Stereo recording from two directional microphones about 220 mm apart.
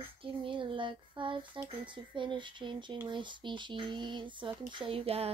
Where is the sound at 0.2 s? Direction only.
25° right (ahead or behind).